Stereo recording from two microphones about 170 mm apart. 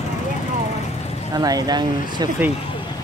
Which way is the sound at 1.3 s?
20° right (ahead or behind).